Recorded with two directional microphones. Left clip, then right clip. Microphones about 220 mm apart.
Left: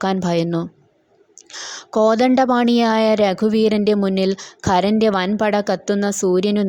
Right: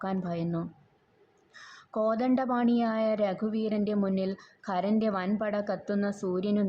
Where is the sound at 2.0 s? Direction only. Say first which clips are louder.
Left 13 dB; 40° left (ahead or behind).